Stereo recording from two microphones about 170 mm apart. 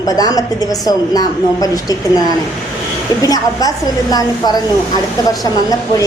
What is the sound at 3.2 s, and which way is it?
Speech, 20° left (ahead or behind).